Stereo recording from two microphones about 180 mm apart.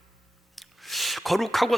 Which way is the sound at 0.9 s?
Centre (ahead or behind).